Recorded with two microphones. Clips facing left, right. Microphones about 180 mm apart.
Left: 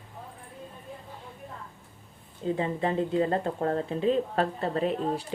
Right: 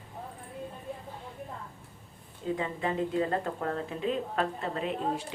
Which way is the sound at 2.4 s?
30° left (ahead or behind).